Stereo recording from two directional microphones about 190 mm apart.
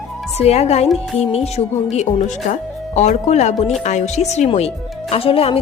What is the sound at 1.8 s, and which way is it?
A woman's voice, 35° left (ahead or behind).